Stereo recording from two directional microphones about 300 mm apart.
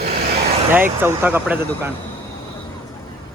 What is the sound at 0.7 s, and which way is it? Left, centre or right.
Speech, centre.